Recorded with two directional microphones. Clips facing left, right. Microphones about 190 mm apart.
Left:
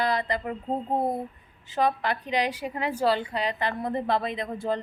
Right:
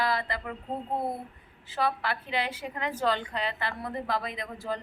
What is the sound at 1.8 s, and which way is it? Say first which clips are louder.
A woman's voice: left 4 dB; 20° left (ahead or behind).